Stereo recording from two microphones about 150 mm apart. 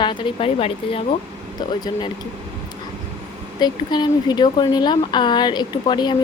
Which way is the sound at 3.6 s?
30° left (ahead or behind).